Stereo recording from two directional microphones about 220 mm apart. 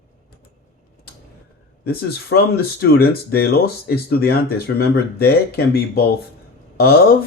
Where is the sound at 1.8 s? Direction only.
45° left (ahead or behind).